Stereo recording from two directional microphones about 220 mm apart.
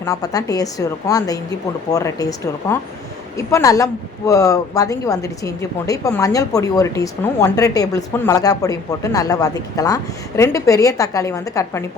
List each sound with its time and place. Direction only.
0.0 s a woman's voice: 15° left (ahead or behind)